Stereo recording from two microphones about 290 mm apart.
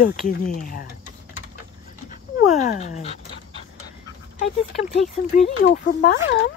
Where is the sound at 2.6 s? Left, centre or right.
Left.